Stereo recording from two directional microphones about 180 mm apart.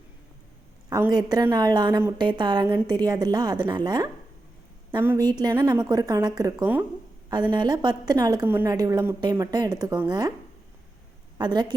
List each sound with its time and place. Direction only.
0.9 s a woman's voice: 20° right (ahead or behind)
11.3 s a woman's voice: 25° right (ahead or behind)